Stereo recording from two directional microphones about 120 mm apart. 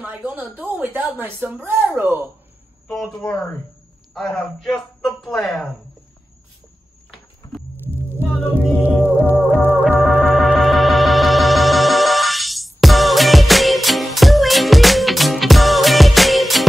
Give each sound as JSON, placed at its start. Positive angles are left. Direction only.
{"t": 0.3, "sound": "speech", "side_deg": -15}
{"t": 3.2, "sound": "a man's voice", "side_deg": 5}
{"t": 7.4, "sound": "music", "side_deg": 30}
{"t": 8.8, "sound": "music", "side_deg": -15}
{"t": 9.5, "sound": "music", "side_deg": 15}
{"t": 9.8, "sound": "music", "side_deg": 0}